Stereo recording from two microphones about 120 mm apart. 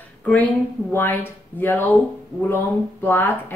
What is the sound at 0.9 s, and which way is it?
Speech, 20° left (ahead or behind).